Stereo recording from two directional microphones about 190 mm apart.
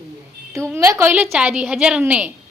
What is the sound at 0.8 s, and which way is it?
A woman's voice, 10° right (ahead or behind).